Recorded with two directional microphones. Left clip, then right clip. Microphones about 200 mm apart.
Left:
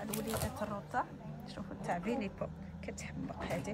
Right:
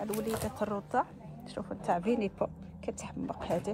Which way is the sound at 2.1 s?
5° left (ahead or behind).